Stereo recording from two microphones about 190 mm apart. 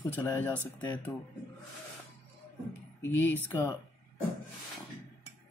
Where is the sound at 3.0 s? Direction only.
10° left (ahead or behind).